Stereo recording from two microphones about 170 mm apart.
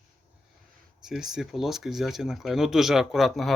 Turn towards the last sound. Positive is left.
turn(degrees=0)  # may be behind; listen again after turning